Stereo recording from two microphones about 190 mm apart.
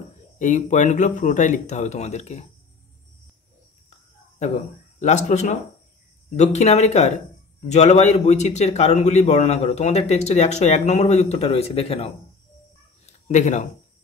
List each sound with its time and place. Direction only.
0.4 s a man's voice: 40° left (ahead or behind)
5.0 s a man's voice: 40° left (ahead or behind)
13.0 s cat: 40° left (ahead or behind)